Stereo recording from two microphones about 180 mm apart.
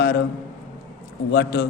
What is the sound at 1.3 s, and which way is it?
Speech, 65° left (ahead or behind).